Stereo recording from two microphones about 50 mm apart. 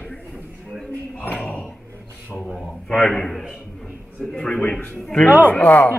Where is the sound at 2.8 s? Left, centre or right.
Centre.